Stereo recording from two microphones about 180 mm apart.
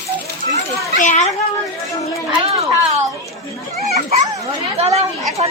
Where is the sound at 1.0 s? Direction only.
45° left (ahead or behind).